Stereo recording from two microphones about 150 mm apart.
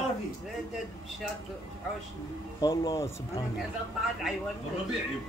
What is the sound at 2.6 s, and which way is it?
Speech, 25° left (ahead or behind).